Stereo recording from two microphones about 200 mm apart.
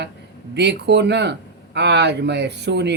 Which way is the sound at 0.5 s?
60° right (ahead or behind).